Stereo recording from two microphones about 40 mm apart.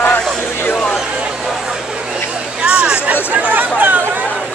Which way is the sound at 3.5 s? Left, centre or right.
Right.